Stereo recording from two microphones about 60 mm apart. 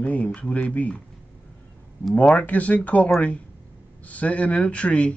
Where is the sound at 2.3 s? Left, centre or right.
Left.